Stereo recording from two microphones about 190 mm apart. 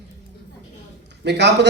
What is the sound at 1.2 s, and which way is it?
Speech, 65° right (ahead or behind).